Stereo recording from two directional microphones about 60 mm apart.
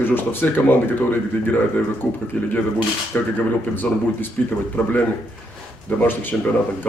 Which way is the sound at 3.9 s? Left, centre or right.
Centre.